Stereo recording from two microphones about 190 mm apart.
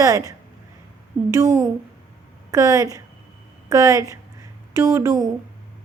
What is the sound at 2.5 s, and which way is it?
A woman's voice, 15° right (ahead or behind).